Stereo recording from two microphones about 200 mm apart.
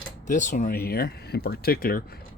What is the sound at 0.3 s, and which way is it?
Speech, 40° left (ahead or behind).